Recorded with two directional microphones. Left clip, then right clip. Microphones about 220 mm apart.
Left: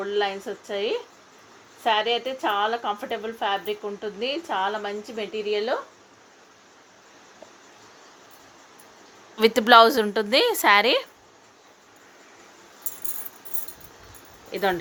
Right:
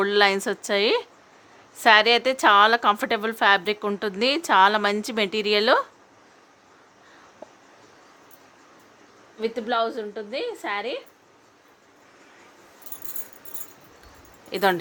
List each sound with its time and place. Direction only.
0.0 s a woman's voice: 35° right (ahead or behind)
9.4 s a woman's voice: 35° left (ahead or behind)
14.5 s speech: 15° right (ahead or behind)